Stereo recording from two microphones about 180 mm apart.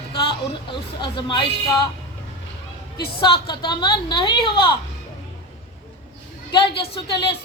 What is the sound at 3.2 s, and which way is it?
A woman's voice, 25° left (ahead or behind).